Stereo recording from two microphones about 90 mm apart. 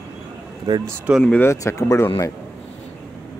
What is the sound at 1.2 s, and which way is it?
Speech, 20° left (ahead or behind).